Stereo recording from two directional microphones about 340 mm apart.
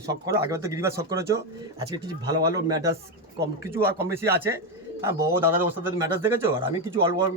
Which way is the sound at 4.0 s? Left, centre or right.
Centre.